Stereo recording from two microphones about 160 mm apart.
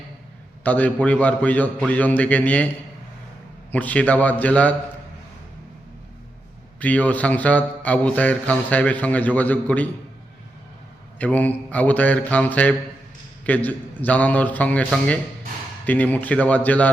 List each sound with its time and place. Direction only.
0.6 s speech: 10° left (ahead or behind)
3.7 s speech: 10° left (ahead or behind)
6.7 s speech: 10° left (ahead or behind)
11.2 s speech: 10° left (ahead or behind)